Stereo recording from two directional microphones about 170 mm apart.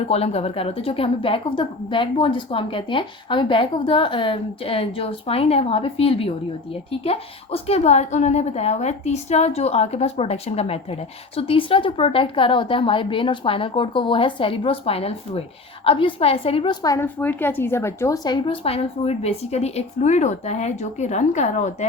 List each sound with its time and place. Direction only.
0.1 s a woman's voice: 35° left (ahead or behind)
16.8 s a woman's voice: 20° left (ahead or behind); by 21.8 s 45° left (ahead or behind)